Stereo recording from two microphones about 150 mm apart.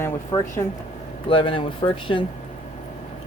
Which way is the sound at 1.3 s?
35° left (ahead or behind).